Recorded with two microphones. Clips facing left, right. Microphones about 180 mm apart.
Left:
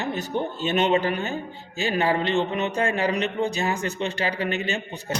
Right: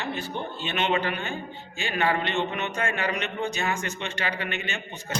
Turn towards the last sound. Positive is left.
turn(degrees=35)  # may be behind; listen again after turning